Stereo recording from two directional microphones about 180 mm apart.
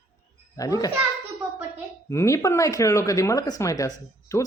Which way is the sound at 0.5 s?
20° left (ahead or behind).